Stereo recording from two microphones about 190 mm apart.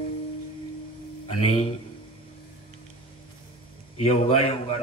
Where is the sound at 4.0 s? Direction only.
35° left (ahead or behind).